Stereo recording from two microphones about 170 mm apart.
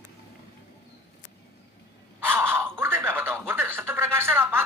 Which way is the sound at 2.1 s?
15° right (ahead or behind).